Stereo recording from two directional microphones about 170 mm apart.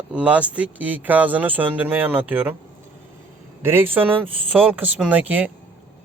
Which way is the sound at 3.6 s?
15° right (ahead or behind).